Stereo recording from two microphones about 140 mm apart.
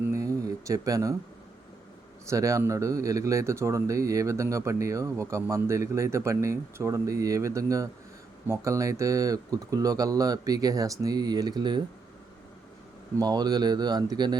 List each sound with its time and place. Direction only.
0.1 s a sound: 25° right (ahead or behind)
2.3 s speech: 25° right (ahead or behind)
13.1 s speech: 30° right (ahead or behind)